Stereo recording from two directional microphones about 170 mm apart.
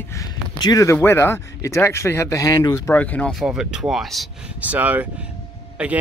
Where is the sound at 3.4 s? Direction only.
5° right (ahead or behind).